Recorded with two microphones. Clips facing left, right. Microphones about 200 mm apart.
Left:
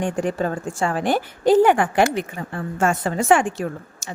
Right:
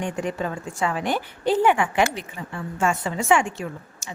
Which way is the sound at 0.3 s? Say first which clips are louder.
Left 4 dB; 40° left (ahead or behind).